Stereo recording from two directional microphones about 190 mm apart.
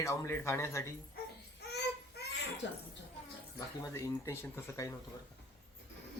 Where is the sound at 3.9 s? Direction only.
15° left (ahead or behind).